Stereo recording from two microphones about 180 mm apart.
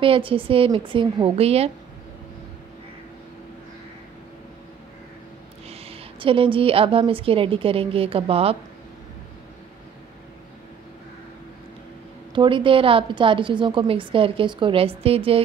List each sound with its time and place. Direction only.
0.0 s a woman's voice: 30° right (ahead or behind)
5.7 s a woman's voice: 30° right (ahead or behind)
12.4 s a woman's voice: 30° right (ahead or behind)